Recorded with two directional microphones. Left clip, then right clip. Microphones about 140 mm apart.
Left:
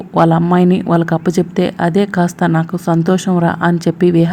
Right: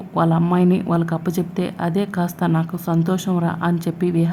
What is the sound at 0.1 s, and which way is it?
A woman's voice, 25° left (ahead or behind).